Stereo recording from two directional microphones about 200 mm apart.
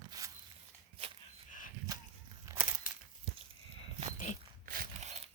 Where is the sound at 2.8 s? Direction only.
45° left (ahead or behind).